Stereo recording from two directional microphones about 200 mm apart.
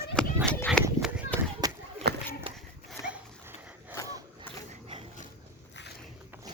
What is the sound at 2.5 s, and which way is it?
Horse, 25° right (ahead or behind).